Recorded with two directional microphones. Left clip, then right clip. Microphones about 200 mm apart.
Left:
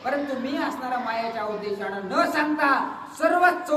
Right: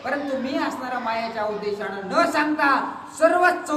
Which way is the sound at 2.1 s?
10° right (ahead or behind).